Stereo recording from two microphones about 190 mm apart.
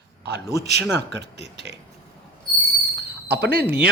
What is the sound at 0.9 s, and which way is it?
Speech, 65° right (ahead or behind).